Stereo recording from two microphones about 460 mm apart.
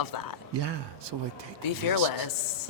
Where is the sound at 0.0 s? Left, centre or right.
Left.